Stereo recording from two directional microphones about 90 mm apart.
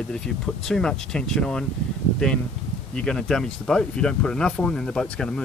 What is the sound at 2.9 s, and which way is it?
Speech, 5° left (ahead or behind).